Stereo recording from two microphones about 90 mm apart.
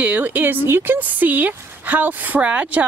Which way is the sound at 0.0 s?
15° right (ahead or behind).